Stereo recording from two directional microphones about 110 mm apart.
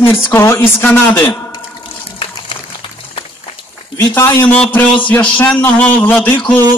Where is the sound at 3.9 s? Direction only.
20° left (ahead or behind).